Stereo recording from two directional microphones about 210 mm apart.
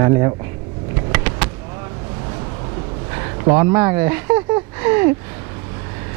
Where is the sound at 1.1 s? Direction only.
10° right (ahead or behind).